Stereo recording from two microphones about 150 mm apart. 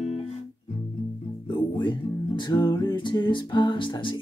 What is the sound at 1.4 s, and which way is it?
Music, 30° left (ahead or behind).